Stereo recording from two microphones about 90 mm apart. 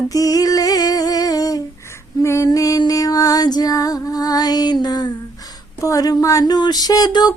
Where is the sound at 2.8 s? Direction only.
45° left (ahead or behind).